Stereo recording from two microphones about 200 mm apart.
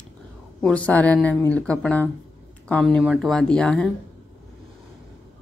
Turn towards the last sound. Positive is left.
turn(degrees=5)  # may be behind; listen again after turning